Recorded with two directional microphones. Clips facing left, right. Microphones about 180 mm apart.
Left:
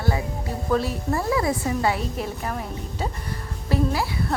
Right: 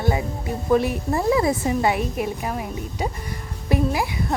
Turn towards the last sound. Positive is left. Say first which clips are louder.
# right 1 dB
turn(degrees=-15)  # may be behind; listen again after turning